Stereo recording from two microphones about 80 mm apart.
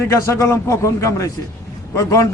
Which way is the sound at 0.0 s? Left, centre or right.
Left.